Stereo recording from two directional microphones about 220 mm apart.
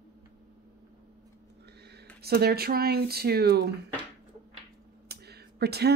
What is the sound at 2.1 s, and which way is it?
Speech, 45° right (ahead or behind).